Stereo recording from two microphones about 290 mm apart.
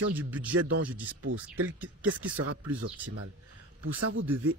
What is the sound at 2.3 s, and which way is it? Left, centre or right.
Speech, right.